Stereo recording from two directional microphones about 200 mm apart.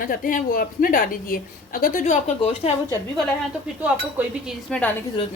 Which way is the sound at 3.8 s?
5° right (ahead or behind).